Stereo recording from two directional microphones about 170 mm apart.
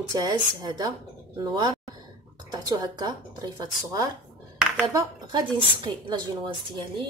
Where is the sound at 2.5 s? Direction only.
25° right (ahead or behind).